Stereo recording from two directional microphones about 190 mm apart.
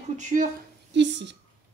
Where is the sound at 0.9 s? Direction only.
70° right (ahead or behind).